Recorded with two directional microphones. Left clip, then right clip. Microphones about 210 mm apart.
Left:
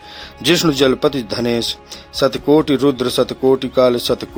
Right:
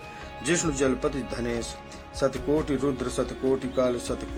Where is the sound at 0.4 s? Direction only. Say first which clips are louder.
Left 12 dB; 35° left (ahead or behind).